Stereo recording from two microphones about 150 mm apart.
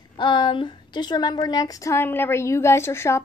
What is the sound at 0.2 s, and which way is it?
A woman's voice, 30° left (ahead or behind).